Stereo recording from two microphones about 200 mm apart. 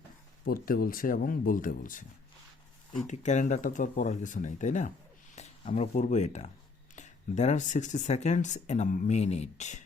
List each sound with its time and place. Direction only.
0.4 s speech: 45° left (ahead or behind)
3.1 s speech: 35° left (ahead or behind)